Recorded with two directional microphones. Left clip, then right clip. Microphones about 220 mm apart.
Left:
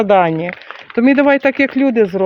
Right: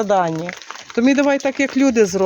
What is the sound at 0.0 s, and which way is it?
Speech, 30° left (ahead or behind).